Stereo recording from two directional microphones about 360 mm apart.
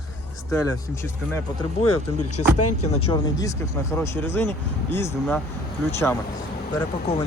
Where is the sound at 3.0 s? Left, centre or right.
Centre.